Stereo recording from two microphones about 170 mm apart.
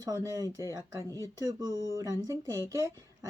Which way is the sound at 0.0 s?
15° right (ahead or behind).